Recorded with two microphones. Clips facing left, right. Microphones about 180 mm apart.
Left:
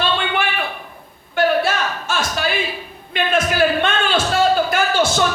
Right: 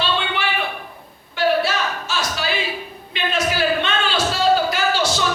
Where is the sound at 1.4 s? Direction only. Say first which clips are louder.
Left 2 dB; 50° left (ahead or behind).